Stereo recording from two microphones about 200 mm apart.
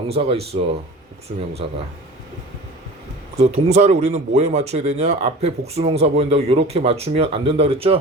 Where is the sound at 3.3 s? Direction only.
30° right (ahead or behind).